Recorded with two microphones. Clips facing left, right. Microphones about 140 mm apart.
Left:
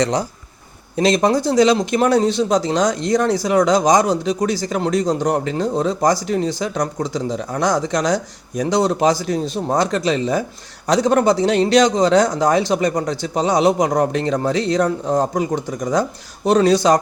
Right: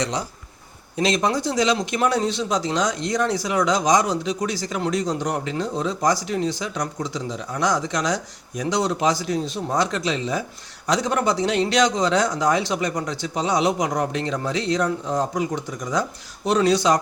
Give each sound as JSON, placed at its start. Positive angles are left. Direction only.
{"t": 0.0, "sound": "speech", "side_deg": 45}